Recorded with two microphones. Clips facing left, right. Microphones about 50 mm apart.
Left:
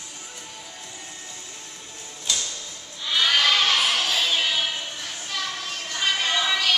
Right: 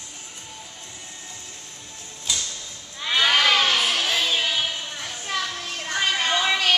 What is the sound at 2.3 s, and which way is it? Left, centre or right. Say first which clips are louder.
Music: even; centre.